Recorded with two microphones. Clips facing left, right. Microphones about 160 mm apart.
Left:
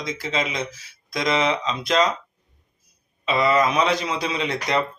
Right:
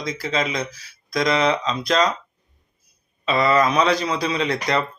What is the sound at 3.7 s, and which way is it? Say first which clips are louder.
Speech: right 2 dB; 35° right (ahead or behind).